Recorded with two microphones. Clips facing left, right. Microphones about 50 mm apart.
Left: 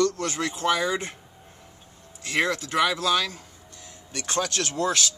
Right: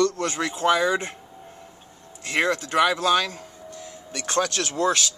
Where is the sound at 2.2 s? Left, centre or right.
Centre.